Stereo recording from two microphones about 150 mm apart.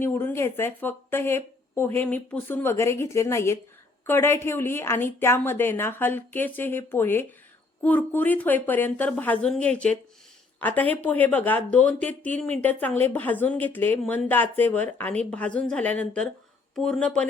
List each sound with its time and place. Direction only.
0.0 s speech: 15° left (ahead or behind)